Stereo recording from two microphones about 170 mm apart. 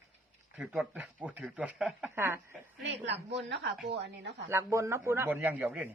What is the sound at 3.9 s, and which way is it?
Speech, 90° right.